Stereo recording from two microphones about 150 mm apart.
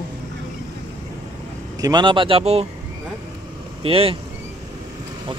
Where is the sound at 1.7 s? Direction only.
25° right (ahead or behind); by 2.7 s 45° right (ahead or behind).